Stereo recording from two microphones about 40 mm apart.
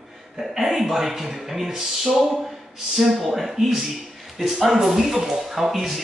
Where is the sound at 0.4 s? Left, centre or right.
Centre.